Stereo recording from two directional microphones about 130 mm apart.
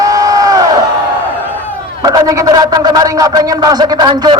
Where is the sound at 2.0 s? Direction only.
25° right (ahead or behind).